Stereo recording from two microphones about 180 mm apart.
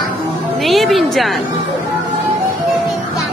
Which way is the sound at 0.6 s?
Centre (ahead or behind).